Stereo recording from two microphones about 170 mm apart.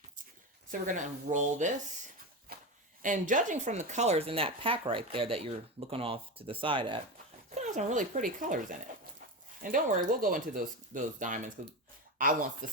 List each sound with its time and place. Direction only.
0.7 s speech: 45° right (ahead or behind)
2.5 s a sound: 60° right (ahead or behind)
3.0 s speech: 50° right (ahead or behind); by 7.0 s 30° right (ahead or behind)
7.5 s speech: 45° right (ahead or behind)
9.6 s speech: 55° right (ahead or behind)